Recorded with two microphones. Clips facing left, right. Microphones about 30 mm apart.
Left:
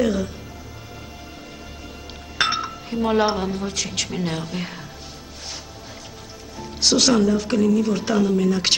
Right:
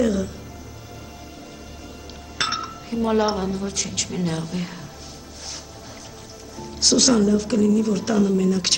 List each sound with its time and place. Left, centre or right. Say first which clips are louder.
0.0 s speech: even; centre
2.3 s speech: left 3 dB; left
6.6 s speech: even; centre